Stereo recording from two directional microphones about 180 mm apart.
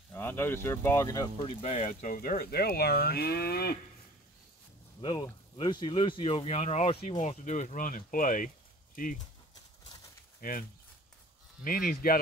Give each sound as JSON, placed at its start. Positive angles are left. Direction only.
{"t": 0.1, "sound": "speech", "side_deg": 10}
{"t": 5.0, "sound": "speech", "side_deg": 20}
{"t": 10.4, "sound": "speech", "side_deg": 55}
{"t": 11.6, "sound": "speech", "side_deg": 50}